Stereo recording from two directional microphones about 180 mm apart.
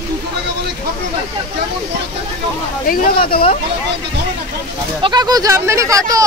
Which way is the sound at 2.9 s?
55° left (ahead or behind).